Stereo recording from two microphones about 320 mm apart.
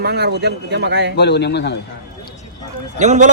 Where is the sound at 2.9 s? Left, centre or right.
Right.